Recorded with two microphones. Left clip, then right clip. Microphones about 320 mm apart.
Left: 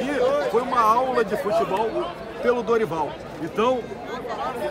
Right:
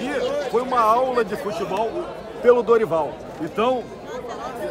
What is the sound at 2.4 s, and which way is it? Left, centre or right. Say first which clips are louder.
Speech: right 5 dB; centre.